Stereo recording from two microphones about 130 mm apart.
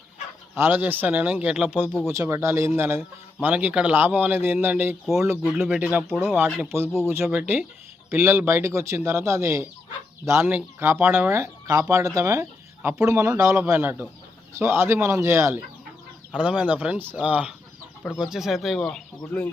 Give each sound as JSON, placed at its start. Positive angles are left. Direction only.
{"t": 0.5, "sound": "speech", "side_deg": -15}
{"t": 16.3, "sound": "speech", "side_deg": -10}